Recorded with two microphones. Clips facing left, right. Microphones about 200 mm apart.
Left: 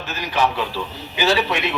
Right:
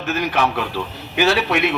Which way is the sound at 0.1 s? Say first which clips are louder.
Right 2 dB; 60° right (ahead or behind).